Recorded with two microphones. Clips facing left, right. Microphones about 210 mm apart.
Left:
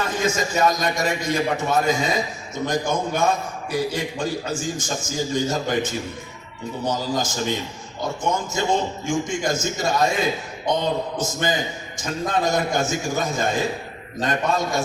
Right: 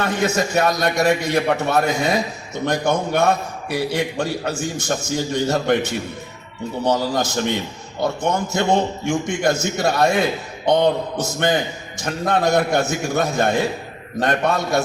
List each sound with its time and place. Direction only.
0.0 s a man's voice: 65° right (ahead or behind)